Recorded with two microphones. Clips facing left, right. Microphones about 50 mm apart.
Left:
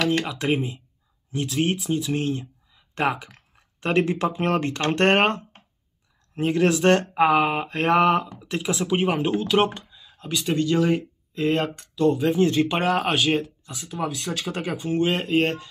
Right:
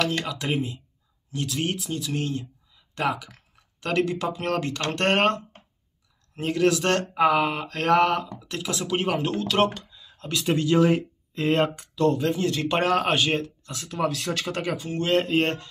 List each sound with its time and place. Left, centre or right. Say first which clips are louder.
0.1 s speech: left 4 dB; left
10.0 s a sound: right 1 dB; centre
10.3 s speech: even; centre
12.1 s speech: left 4 dB; centre
12.4 s speech: left 6 dB; left
12.6 s speech: even; centre
14.8 s speech: left 3 dB; centre
15.1 s speech: even; centre